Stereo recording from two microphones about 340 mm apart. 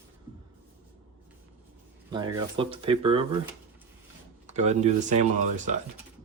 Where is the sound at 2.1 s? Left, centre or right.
Centre.